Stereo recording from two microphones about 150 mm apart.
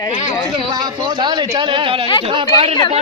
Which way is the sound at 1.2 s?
30° right (ahead or behind).